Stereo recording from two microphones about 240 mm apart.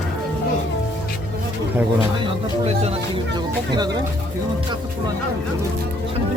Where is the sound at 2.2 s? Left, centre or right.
Right.